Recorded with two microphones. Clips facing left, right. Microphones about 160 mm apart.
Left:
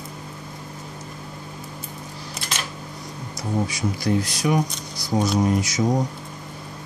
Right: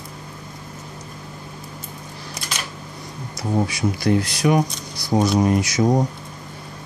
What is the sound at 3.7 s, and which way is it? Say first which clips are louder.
Speech: right 3 dB; 65° right (ahead or behind).